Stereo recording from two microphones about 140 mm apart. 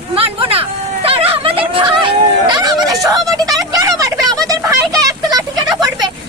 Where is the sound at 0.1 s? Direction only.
40° right (ahead or behind).